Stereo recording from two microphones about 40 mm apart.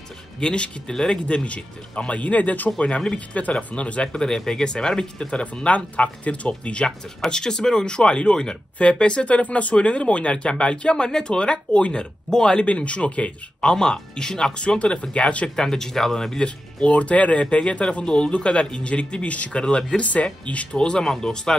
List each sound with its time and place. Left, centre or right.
0.4 s speech: left
1.2 s speech: left
2.8 s speech: left
4.1 s speech: centre
5.3 s speech: left
7.2 s speech: centre
9.3 s speech: left; by 12.6 s centre
12.6 s speech: left
13.7 s speech: centre
15.5 s speech: centre
16.4 s speech: left
20.8 s speech: left